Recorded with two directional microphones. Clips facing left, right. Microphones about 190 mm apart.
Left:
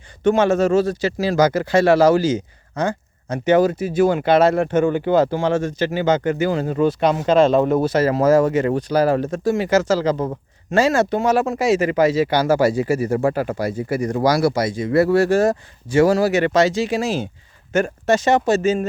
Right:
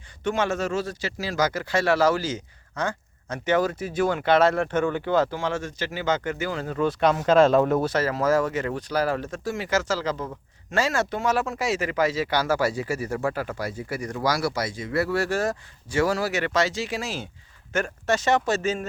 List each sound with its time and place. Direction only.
0.3 s speech: 25° left (ahead or behind)
5.3 s speech: 20° left (ahead or behind)
6.8 s speech: centre (ahead or behind)
7.9 s speech: 15° left (ahead or behind)
9.1 s speech: 35° left (ahead or behind)
9.4 s speech: 20° left (ahead or behind)
13.1 s speech: 30° left (ahead or behind)
13.3 s speech: 20° left (ahead or behind)